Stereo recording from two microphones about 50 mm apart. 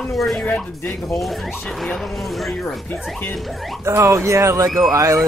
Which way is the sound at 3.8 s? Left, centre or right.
Right.